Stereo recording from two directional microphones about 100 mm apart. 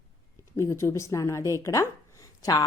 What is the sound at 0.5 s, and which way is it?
A woman's voice, 30° left (ahead or behind).